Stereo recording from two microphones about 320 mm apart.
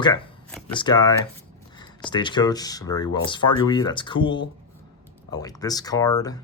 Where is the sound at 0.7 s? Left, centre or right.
Centre.